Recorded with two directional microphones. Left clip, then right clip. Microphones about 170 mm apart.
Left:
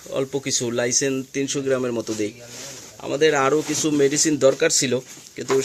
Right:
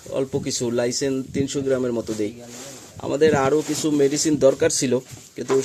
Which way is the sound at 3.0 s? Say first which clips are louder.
Even; 25° right (ahead or behind).